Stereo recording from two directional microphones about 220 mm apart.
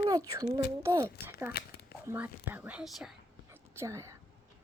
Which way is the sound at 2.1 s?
10° right (ahead or behind).